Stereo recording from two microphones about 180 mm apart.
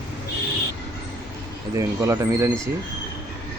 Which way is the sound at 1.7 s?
15° right (ahead or behind).